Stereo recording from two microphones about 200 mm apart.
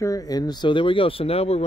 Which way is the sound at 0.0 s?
15° left (ahead or behind).